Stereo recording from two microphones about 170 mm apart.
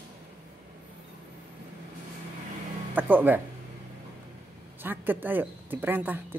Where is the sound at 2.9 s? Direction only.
10° right (ahead or behind).